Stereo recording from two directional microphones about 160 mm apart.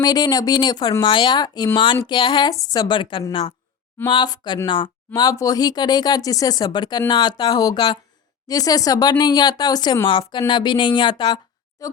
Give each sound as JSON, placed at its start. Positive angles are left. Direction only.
{"t": 0.0, "sound": "a woman's voice", "side_deg": 25}